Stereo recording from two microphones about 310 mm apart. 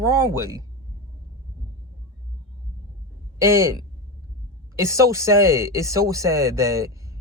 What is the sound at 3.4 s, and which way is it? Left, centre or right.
A man's voice, centre.